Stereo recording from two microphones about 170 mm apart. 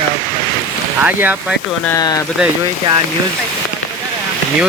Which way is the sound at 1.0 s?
10° right (ahead or behind).